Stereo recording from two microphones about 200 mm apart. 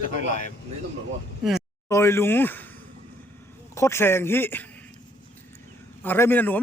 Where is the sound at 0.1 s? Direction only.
40° left (ahead or behind).